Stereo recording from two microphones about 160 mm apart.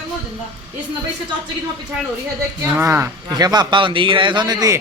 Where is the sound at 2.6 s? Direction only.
15° right (ahead or behind).